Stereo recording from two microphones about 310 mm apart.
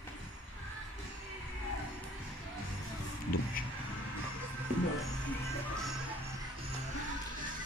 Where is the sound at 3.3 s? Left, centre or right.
Left.